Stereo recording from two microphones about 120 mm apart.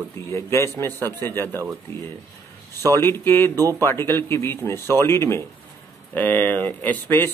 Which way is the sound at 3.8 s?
20° left (ahead or behind).